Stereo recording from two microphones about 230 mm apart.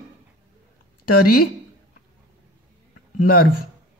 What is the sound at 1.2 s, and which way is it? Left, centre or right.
Speech, left.